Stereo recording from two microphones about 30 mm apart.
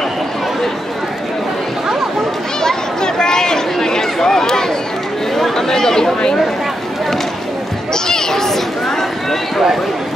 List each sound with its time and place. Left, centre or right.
2.6 s chatter: left
7.9 s run: centre